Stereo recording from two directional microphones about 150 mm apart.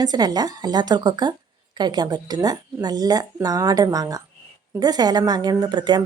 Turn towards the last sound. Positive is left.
turn(degrees=-30)  # may be behind; listen again after turning